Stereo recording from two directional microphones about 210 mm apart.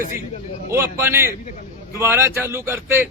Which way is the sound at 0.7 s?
10° right (ahead or behind).